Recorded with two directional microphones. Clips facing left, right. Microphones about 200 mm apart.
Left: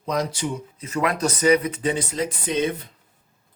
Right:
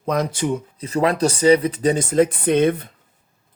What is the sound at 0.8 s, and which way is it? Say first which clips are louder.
Speech: right 4 dB; 35° right (ahead or behind).